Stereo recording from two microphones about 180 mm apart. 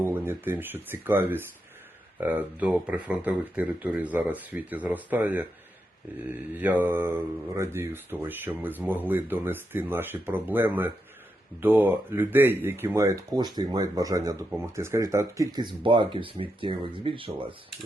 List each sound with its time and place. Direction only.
0.0 s speech: 10° right (ahead or behind)
6.5 s speech: 10° right (ahead or behind); by 17.3 s 30° right (ahead or behind)